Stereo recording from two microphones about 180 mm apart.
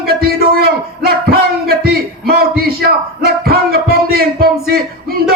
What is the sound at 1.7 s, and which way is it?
Speech, 60° right (ahead or behind).